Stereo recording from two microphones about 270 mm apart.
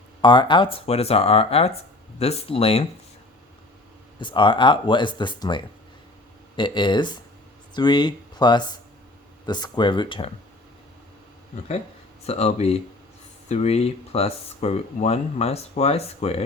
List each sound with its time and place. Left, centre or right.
0.2 s speech: centre
4.2 s speech: centre
12.2 s speech: left